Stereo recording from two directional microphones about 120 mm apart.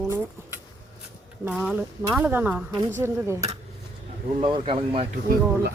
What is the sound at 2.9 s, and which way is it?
Speech, 20° right (ahead or behind).